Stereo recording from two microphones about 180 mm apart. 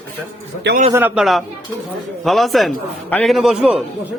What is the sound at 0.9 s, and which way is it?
A man's voice, 10° right (ahead or behind).